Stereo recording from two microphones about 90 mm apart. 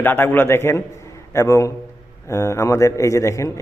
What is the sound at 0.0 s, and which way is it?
A man's voice, 25° left (ahead or behind).